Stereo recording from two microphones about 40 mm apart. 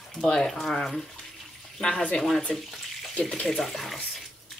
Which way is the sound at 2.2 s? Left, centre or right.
Centre.